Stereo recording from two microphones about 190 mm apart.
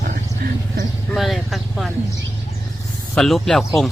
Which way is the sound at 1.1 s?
Centre (ahead or behind).